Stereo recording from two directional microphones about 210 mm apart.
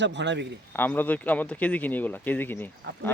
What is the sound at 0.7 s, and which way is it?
Speech, 10° left (ahead or behind).